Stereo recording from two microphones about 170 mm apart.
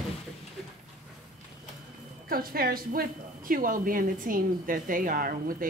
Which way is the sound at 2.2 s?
60° right (ahead or behind).